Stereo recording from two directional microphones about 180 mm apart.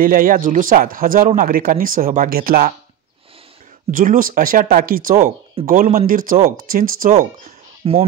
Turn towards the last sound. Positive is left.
turn(degrees=-30)  # may be behind; listen again after turning